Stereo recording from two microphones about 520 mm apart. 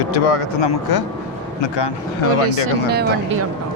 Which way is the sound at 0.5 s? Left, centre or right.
Left.